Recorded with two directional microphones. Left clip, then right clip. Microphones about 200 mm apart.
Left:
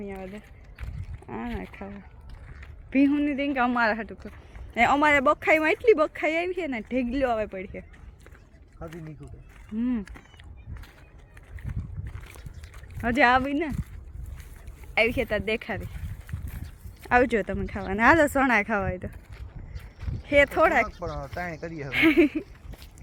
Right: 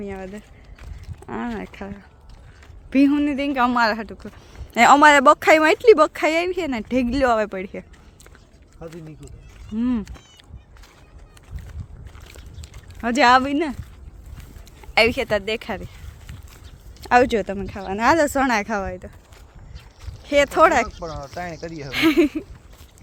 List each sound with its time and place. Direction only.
0.0 s speech: 15° right (ahead or behind)
2.9 s speech: 15° right (ahead or behind)
4.7 s speech: 25° right (ahead or behind)
9.7 s speech: 20° right (ahead or behind)
12.2 s a sound: 30° left (ahead or behind)
13.0 s speech: 15° right (ahead or behind)
14.9 s speech: 30° right (ahead or behind)
17.0 s speech: 15° right (ahead or behind); by 19.1 s centre (ahead or behind)
20.2 s speech: 15° right (ahead or behind)
21.0 s speech: 15° left (ahead or behind)
21.2 s speech: 5° left (ahead or behind)
21.8 s speech: 5° right (ahead or behind)